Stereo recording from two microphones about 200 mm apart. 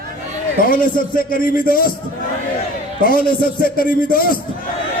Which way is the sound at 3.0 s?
45° left (ahead or behind).